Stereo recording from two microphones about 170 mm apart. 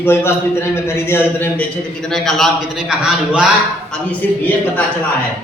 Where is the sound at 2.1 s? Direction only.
Centre (ahead or behind).